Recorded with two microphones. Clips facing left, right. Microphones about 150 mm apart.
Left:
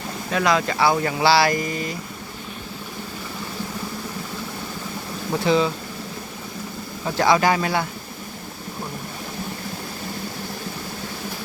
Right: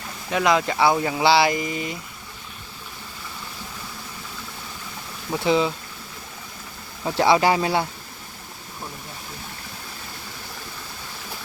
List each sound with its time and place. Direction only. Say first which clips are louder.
0.3 s speech: even; 20° right (ahead or behind)
5.5 s speech: left 1 dB; 15° right (ahead or behind)
7.2 s speech: even; 25° right (ahead or behind)